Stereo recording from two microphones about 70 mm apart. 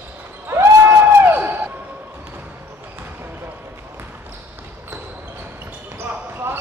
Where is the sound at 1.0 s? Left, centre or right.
Right.